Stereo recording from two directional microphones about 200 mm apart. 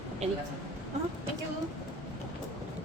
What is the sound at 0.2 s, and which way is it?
Speech, 35° right (ahead or behind).